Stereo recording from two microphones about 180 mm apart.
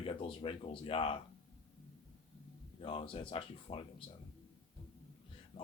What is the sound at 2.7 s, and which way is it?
Speech, 30° left (ahead or behind).